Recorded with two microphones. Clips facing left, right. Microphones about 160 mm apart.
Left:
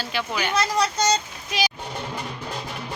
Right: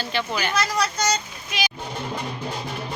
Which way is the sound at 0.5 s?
25° left (ahead or behind).